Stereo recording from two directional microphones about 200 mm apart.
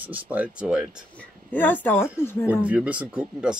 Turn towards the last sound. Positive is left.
turn(degrees=-5)  # may be behind; listen again after turning